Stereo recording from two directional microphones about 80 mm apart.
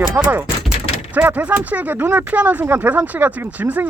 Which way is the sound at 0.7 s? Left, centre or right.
Centre.